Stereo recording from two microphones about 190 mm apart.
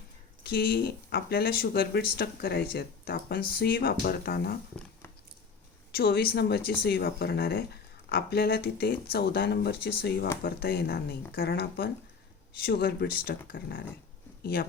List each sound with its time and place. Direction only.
0.4 s speech: 55° left (ahead or behind)
6.0 s speech: 55° left (ahead or behind)